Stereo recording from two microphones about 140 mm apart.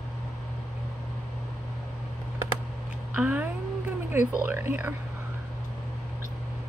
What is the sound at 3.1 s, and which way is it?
Speech, 10° right (ahead or behind).